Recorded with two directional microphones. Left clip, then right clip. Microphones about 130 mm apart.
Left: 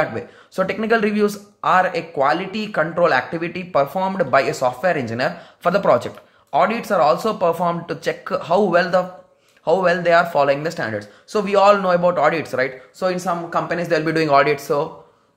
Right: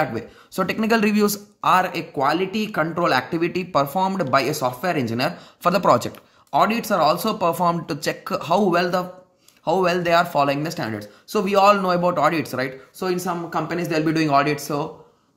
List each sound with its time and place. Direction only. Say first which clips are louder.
0.0 s speech: left 2 dB; 30° right (ahead or behind)
0.7 s speech: left 1 dB; 45° right (ahead or behind)
1.6 s speech: left 2 dB; 30° right (ahead or behind)